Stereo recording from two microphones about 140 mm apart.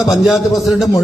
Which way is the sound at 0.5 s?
Centre (ahead or behind).